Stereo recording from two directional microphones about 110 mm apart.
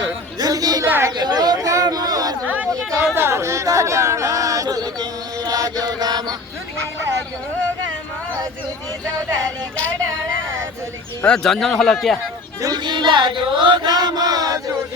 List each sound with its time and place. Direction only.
0.3 s chatter: 35° right (ahead or behind)
0.9 s a sound: 20° right (ahead or behind)
1.1 s a sound: 40° right (ahead or behind)
2.6 s chatter: 30° right (ahead or behind)
11.2 s speech: 5° left (ahead or behind)
12.6 s chant: 40° right (ahead or behind)